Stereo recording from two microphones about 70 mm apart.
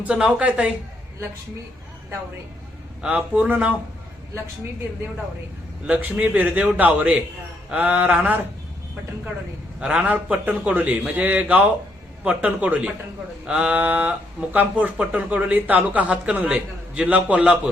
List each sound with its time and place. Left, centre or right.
0.1 s a man's voice: centre
3.0 s speech: right
5.8 s speech: right
9.8 s a man's voice: centre